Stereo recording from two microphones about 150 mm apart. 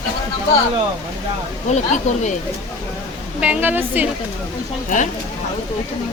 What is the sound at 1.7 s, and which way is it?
Speech, 50° left (ahead or behind).